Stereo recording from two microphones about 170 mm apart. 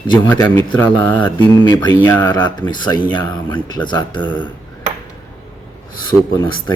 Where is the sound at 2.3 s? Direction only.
25° left (ahead or behind).